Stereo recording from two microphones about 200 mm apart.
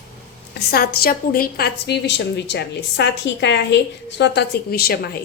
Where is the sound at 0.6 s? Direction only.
50° left (ahead or behind).